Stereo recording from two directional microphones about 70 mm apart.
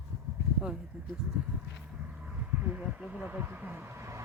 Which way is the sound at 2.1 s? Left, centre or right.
Centre.